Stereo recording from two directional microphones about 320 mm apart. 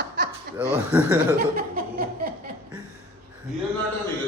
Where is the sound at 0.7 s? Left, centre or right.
Centre.